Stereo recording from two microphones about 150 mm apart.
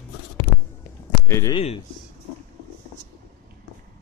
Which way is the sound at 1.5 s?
35° left (ahead or behind).